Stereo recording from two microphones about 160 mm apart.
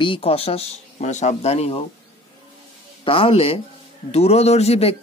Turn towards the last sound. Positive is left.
turn(degrees=40)  # may be behind; listen again after turning